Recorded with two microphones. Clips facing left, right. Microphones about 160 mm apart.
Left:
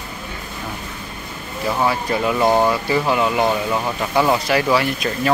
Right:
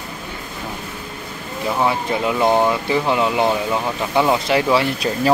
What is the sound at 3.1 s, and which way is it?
Speech, 20° right (ahead or behind).